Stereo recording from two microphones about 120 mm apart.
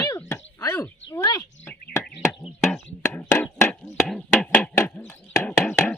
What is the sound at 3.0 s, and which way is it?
Chopping, 20° left (ahead or behind).